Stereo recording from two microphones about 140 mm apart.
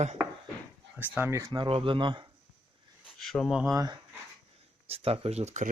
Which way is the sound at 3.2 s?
Centre (ahead or behind).